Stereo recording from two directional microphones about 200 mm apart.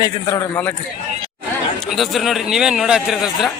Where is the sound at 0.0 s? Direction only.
15° left (ahead or behind).